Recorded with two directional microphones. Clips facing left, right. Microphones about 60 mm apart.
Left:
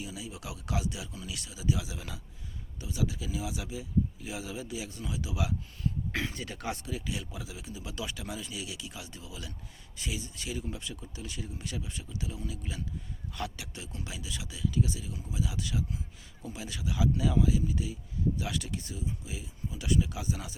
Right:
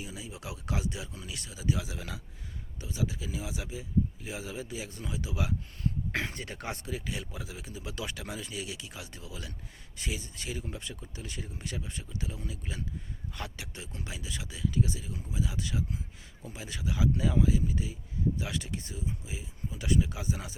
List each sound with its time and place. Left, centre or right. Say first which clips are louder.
0.0 s speech: left 1 dB; right
2.8 s speech: left 1 dB; right
6.4 s speech: left 1 dB; right